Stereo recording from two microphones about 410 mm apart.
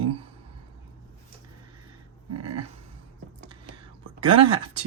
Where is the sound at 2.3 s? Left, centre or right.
Right.